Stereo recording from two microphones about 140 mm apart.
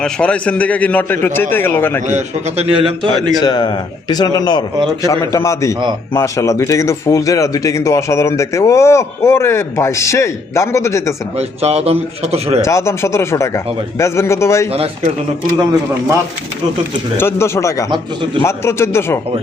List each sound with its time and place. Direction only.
0.0 s a man's voice: 10° left (ahead or behind)
2.0 s a man's voice: 55° right (ahead or behind)
2.7 s a man's voice: 35° right (ahead or behind)
3.4 s speech: 30° left (ahead or behind)
11.3 s a man's voice: 50° right (ahead or behind)
12.6 s speech: 20° left (ahead or behind)
17.2 s speech: 15° left (ahead or behind)